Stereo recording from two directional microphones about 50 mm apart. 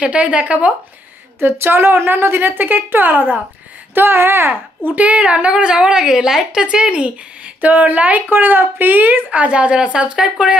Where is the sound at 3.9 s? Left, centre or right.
Right.